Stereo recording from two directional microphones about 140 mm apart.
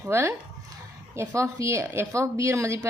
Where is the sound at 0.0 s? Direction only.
15° right (ahead or behind).